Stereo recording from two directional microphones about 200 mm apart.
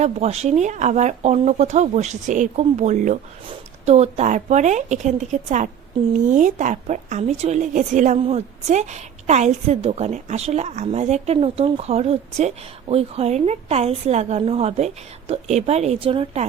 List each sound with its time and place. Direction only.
0.0 s a woman's voice: 30° right (ahead or behind)